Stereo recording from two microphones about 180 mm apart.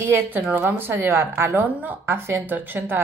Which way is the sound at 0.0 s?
10° right (ahead or behind).